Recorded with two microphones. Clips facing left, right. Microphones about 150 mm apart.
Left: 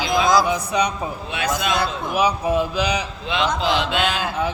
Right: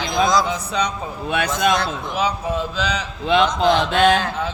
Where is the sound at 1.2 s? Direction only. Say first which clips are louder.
Right 5 dB; 55° right (ahead or behind).